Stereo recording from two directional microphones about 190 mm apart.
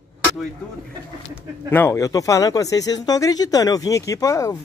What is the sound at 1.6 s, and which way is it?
Speech, 10° left (ahead or behind).